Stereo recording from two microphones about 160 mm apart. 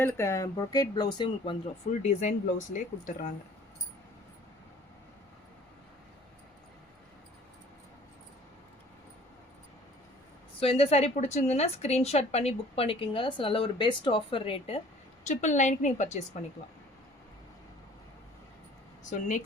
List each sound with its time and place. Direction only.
0.0 s speech: 15° left (ahead or behind)
1.9 s speech: 45° left (ahead or behind)
10.6 s a woman's voice: 35° left (ahead or behind)
15.2 s speech: 50° left (ahead or behind)
19.1 s speech: 50° left (ahead or behind)